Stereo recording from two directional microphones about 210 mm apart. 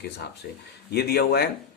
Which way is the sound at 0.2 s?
50° left (ahead or behind).